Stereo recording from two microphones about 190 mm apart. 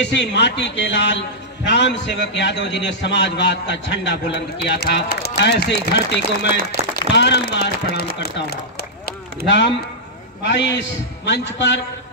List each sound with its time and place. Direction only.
0.0 s a man's voice: 65° left (ahead or behind)
8.2 s a sound: 55° left (ahead or behind)
10.4 s a man's voice: 65° left (ahead or behind)